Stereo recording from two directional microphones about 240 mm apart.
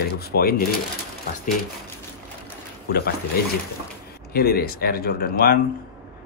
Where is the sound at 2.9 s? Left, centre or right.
Left.